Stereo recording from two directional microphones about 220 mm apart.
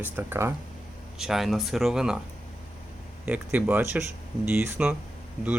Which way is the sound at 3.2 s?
10° right (ahead or behind).